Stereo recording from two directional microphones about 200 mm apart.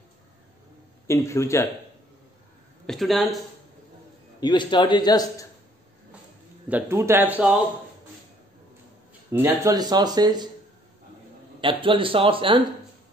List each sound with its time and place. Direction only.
1.0 s speech: 15° left (ahead or behind)
2.9 s speech: centre (ahead or behind)
4.4 s a man's voice: 20° left (ahead or behind)
6.7 s speech: 15° right (ahead or behind)
9.3 s speech: 15° right (ahead or behind)
11.6 s speech: 25° right (ahead or behind)